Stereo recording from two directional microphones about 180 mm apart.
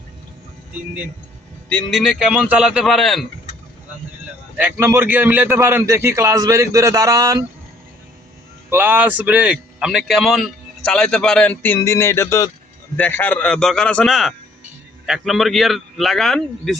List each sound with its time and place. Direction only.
1.7 s a man's voice: centre (ahead or behind)
4.5 s a man's voice: 10° right (ahead or behind)
8.7 s a man's voice: 10° right (ahead or behind)